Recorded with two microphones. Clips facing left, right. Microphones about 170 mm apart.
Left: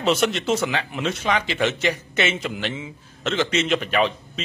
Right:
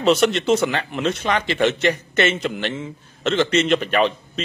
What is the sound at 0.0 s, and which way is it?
A man's voice, centre (ahead or behind).